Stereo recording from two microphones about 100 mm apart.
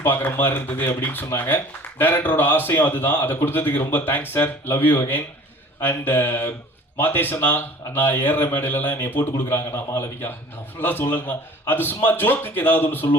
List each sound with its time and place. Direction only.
0.0 s speech: 20° left (ahead or behind)